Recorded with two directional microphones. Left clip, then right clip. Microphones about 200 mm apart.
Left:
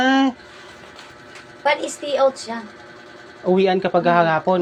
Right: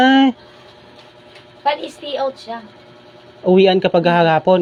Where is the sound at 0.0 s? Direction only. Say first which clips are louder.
Right 5 dB; 60° right (ahead or behind).